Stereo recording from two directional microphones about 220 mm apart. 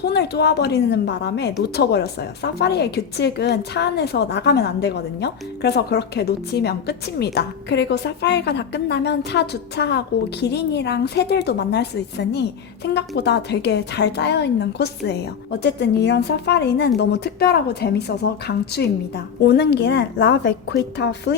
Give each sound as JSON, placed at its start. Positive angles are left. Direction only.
{"t": 0.0, "sound": "a woman's voice", "side_deg": 50}